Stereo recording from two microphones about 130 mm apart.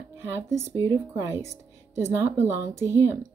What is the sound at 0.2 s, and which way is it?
Speech, 20° right (ahead or behind).